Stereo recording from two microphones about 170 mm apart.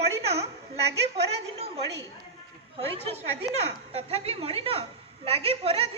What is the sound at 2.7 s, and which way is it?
Speech, 35° right (ahead or behind).